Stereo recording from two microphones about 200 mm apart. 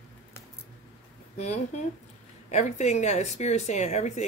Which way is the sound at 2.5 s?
35° left (ahead or behind).